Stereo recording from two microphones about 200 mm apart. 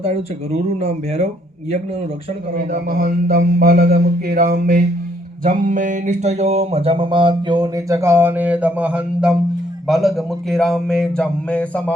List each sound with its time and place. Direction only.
0.8 s speech: 30° right (ahead or behind)
2.9 s mantra: 45° right (ahead or behind)
5.4 s a sound: 40° right (ahead or behind); by 9.4 s 5° right (ahead or behind)
9.8 s speech: centre (ahead or behind)